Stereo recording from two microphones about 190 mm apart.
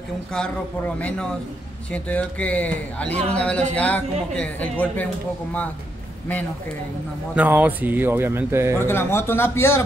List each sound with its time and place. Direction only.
0.3 s a man's voice: 5° left (ahead or behind)
7.3 s speech: 10° right (ahead or behind)
8.7 s speech: 10° left (ahead or behind)